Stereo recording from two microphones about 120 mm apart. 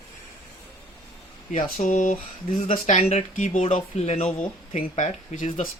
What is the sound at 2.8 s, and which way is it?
Speech, 70° left (ahead or behind).